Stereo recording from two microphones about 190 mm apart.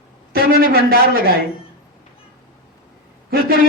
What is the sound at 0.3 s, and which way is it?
Speech, 50° right (ahead or behind).